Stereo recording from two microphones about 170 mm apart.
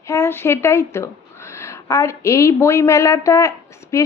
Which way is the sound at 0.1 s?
15° left (ahead or behind).